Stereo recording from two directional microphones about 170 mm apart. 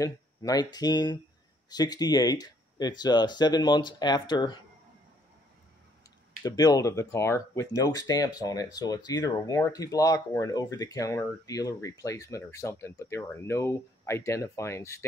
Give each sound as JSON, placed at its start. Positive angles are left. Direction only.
{"t": 0.0, "sound": "speech", "side_deg": 20}
{"t": 6.4, "sound": "speech", "side_deg": 20}